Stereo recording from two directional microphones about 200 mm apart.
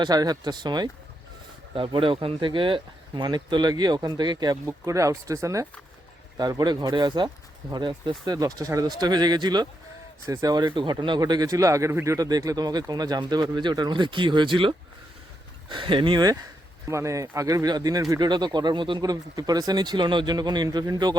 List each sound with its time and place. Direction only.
0.0 s speech: 20° right (ahead or behind)